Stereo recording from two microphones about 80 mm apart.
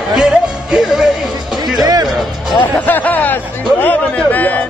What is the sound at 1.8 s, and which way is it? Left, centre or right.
Music, right.